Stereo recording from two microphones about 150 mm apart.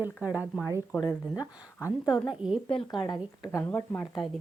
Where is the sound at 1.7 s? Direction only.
20° left (ahead or behind).